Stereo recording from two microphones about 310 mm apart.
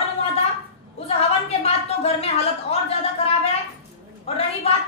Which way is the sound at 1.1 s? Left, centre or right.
Centre.